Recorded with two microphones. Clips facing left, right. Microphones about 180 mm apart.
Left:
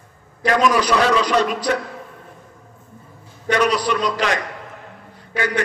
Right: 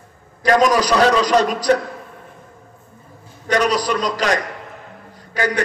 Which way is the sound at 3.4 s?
40° right (ahead or behind).